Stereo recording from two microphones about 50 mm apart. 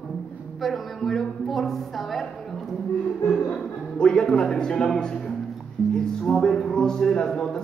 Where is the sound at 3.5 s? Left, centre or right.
Left.